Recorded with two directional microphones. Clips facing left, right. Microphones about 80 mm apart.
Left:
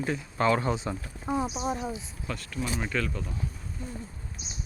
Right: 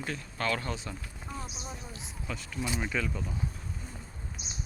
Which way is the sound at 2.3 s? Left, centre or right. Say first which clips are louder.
Left 2 dB; centre.